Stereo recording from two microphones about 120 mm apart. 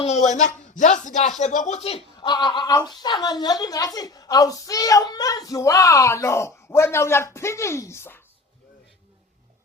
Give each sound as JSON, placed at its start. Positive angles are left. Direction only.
{"t": 0.0, "sound": "speech", "side_deg": 75}
{"t": 2.1, "sound": "speech", "side_deg": 40}